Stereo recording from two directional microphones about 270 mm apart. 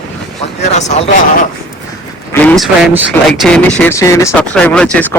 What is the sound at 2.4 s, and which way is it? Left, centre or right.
Speech, centre.